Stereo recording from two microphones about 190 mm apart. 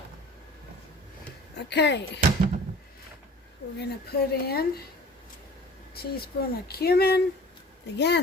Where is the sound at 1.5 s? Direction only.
65° left (ahead or behind).